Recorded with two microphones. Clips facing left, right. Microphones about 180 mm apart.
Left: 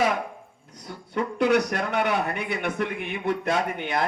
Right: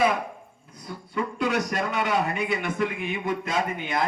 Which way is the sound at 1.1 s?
65° left (ahead or behind).